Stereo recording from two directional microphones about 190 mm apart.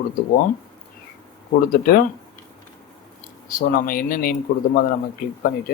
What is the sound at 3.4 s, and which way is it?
Speech, 50° left (ahead or behind).